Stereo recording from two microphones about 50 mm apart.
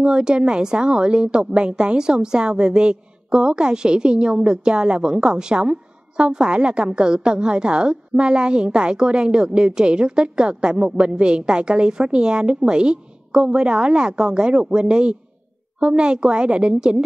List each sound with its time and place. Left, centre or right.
0.0 s a woman's voice: centre